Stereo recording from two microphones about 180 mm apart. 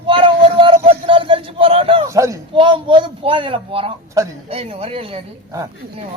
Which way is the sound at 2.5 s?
25° right (ahead or behind).